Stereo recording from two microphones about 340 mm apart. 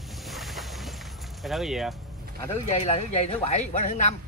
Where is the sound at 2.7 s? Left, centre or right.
Centre.